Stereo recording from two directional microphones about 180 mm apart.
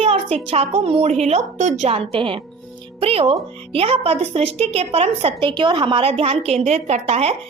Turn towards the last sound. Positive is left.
turn(degrees=-35)  # may be behind; listen again after turning